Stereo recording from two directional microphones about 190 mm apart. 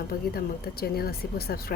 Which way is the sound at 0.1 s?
50° left (ahead or behind).